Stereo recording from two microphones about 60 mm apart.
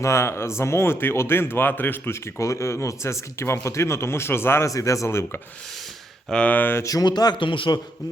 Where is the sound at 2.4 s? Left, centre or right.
Left.